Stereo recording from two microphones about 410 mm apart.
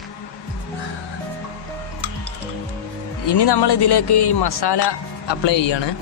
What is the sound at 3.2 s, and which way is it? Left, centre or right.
Speech, left.